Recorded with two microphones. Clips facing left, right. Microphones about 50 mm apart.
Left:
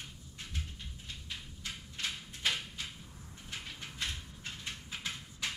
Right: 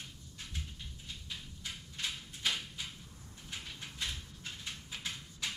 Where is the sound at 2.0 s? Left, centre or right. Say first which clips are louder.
Left 1 dB; centre.